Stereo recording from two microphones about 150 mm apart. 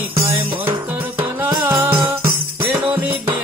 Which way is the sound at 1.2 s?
15° right (ahead or behind).